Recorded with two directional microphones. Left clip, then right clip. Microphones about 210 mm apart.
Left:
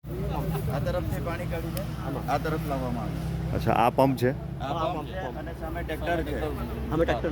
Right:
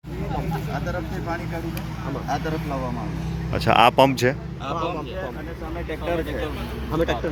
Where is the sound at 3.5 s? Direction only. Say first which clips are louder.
Right 7 dB; centre (ahead or behind).